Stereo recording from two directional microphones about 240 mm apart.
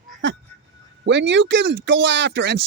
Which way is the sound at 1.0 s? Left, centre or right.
Right.